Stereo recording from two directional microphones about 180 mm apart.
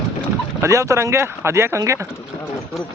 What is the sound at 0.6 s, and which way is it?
Speech, 15° right (ahead or behind).